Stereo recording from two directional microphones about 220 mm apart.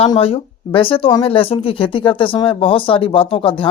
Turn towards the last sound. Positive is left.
turn(degrees=25)  # may be behind; listen again after turning